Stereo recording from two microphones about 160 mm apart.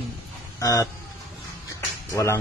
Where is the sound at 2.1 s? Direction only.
20° left (ahead or behind).